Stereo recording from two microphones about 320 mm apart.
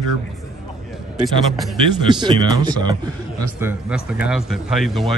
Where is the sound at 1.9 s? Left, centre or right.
Centre.